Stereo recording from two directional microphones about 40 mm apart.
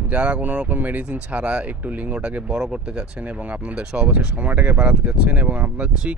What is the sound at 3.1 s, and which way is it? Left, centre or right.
Speech, right.